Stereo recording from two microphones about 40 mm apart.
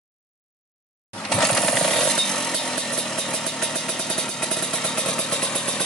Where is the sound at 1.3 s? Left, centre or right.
Centre.